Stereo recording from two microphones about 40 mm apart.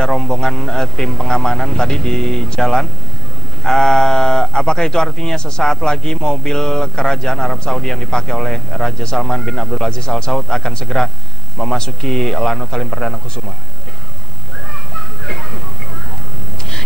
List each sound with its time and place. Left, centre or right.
0.0 s a man's voice: centre
15.0 s children playing: centre